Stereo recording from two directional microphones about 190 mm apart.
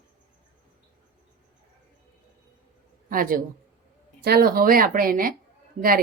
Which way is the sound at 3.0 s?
45° right (ahead or behind).